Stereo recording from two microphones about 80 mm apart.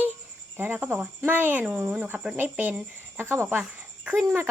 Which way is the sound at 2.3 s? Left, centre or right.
Right.